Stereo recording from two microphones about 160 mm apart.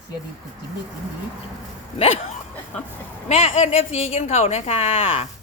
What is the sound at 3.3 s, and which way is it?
Speech, 40° left (ahead or behind).